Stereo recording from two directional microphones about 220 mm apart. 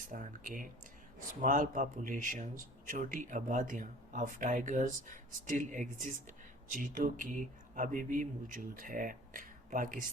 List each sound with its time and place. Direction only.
0.0 s speech: 35° right (ahead or behind)